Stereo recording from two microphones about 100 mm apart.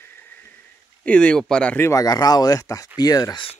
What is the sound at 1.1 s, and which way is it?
Speech, 10° left (ahead or behind).